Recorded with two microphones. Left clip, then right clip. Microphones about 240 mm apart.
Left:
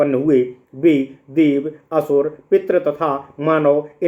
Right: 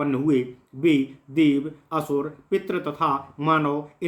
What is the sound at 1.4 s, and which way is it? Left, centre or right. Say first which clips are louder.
Speech: left 2 dB; right.